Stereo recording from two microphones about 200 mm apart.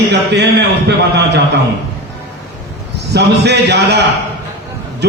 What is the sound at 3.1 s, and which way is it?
Speech, 55° right (ahead or behind).